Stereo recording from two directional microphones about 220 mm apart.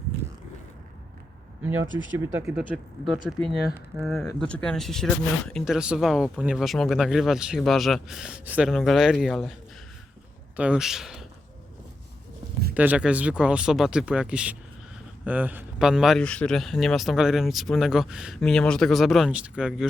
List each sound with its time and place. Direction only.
1.8 s speech: 60° right (ahead or behind)
2.1 s speech: 5° right (ahead or behind)
10.6 s speech: 5° right (ahead or behind)
12.7 s speech: 5° right (ahead or behind)